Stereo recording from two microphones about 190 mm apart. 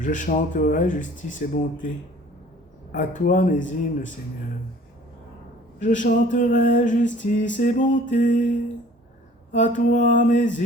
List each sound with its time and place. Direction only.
0.0 s speech: 45° left (ahead or behind)
2.9 s speech: 45° left (ahead or behind)
5.8 s speech: 40° left (ahead or behind)
7.6 s music: 40° left (ahead or behind)
9.5 s speech: 40° left (ahead or behind)